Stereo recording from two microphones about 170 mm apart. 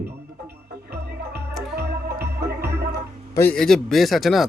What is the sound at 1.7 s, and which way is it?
Music, 70° right (ahead or behind).